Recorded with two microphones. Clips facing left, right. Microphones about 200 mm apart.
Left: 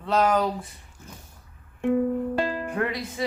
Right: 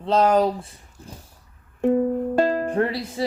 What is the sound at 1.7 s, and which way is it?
Music, 40° right (ahead or behind).